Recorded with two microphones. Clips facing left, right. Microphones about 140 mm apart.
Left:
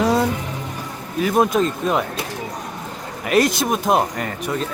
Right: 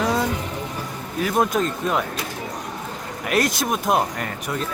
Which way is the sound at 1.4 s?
10° left (ahead or behind).